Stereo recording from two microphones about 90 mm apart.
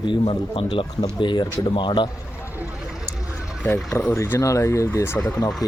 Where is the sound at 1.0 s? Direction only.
60° left (ahead or behind).